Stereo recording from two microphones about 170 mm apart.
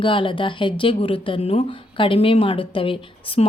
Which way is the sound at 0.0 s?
30° left (ahead or behind).